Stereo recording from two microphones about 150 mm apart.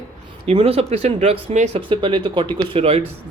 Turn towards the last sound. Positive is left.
turn(degrees=-40)  # may be behind; listen again after turning